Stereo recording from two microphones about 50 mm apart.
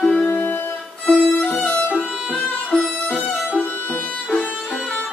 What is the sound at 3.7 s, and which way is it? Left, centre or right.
Violin, left.